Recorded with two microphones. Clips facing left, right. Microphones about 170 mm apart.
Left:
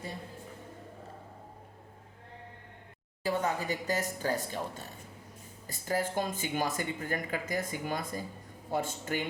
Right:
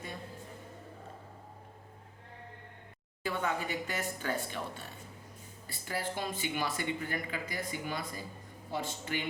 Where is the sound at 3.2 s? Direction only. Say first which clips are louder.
Left 3 dB; 40° left (ahead or behind).